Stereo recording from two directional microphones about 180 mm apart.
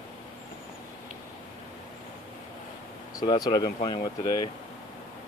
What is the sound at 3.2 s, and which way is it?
Speech, 25° left (ahead or behind).